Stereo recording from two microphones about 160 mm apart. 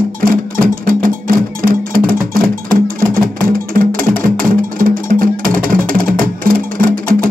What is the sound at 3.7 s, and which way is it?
Music, 65° right (ahead or behind).